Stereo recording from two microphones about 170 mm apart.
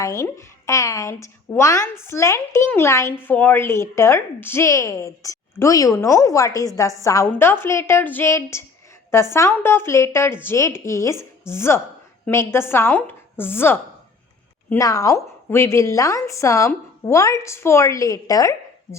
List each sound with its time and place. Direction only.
0.0 s speech: 20° left (ahead or behind)